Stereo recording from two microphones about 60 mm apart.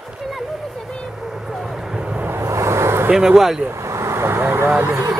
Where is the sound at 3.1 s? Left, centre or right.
Centre.